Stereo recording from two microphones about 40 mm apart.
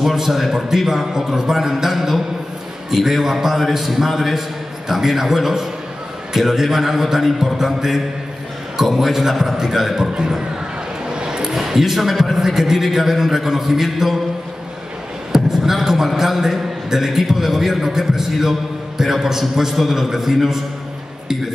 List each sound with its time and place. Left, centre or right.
0.0 s a man's voice: centre
11.1 s a sound: centre
11.5 s a man's voice: centre
15.3 s a man's voice: centre